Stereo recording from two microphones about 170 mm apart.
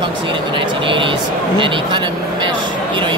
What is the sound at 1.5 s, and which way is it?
Speech, 30° right (ahead or behind).